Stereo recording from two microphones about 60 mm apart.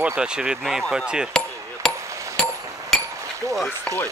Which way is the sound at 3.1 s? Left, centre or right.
Right.